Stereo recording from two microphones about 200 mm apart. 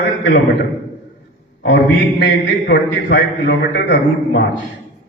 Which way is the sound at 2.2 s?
60° left (ahead or behind).